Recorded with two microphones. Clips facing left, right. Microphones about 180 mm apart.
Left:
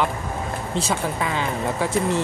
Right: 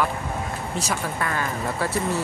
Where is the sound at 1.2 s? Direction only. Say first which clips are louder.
Left 2 dB; 15° left (ahead or behind).